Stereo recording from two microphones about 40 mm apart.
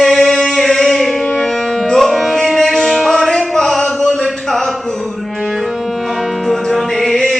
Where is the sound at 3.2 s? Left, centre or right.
Centre.